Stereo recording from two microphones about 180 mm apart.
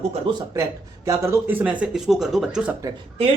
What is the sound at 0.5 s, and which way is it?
Speech, 15° right (ahead or behind).